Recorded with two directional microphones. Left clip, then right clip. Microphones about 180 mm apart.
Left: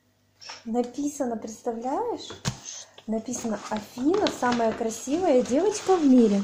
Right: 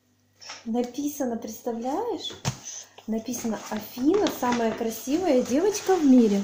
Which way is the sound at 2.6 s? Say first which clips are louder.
Right 1 dB; 10° right (ahead or behind).